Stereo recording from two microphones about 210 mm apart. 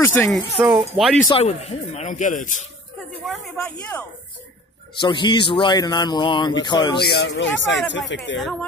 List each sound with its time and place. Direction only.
0.0 s speech: 10° left (ahead or behind)
0.6 s speech: 5° right (ahead or behind)
1.2 s speech: 30° left (ahead or behind)
3.3 s speech: centre (ahead or behind)
5.0 s a man's voice: 20° left (ahead or behind)
7.0 s speech: 50° left (ahead or behind)
8.4 s speech: centre (ahead or behind)